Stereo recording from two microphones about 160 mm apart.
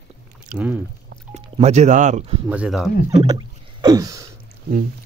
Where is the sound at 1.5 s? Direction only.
45° right (ahead or behind).